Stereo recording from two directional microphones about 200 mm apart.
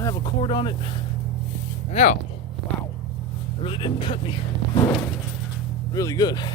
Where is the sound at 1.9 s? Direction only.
35° left (ahead or behind).